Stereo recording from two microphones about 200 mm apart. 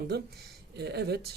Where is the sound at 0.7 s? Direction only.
55° right (ahead or behind).